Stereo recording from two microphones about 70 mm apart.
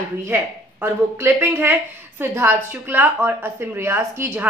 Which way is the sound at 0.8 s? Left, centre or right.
Right.